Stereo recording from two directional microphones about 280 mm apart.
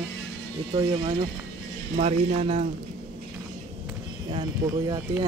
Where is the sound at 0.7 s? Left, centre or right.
Centre.